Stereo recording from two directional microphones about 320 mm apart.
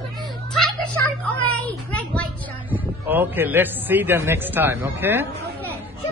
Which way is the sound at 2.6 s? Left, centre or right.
Centre.